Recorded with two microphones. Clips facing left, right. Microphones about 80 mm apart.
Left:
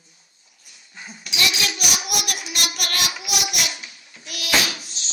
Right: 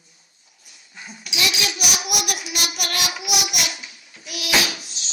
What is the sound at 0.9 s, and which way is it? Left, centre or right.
Child singing, centre.